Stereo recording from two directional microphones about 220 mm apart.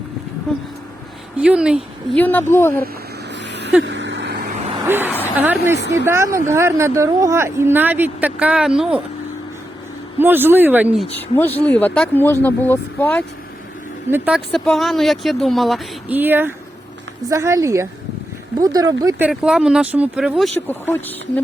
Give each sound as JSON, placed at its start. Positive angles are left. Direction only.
{"t": 1.4, "sound": "speech", "side_deg": -5}
{"t": 2.1, "sound": "speech", "side_deg": 10}
{"t": 3.5, "sound": "a sound", "side_deg": -55}
{"t": 4.4, "sound": "vehicle", "side_deg": -30}
{"t": 4.9, "sound": "a sound", "side_deg": -10}
{"t": 5.4, "sound": "speech", "side_deg": -10}
{"t": 10.2, "sound": "speech", "side_deg": -10}
{"t": 14.1, "sound": "speech", "side_deg": -5}
{"t": 19.3, "sound": "speech", "side_deg": -5}
{"t": 20.7, "sound": "speech", "side_deg": 10}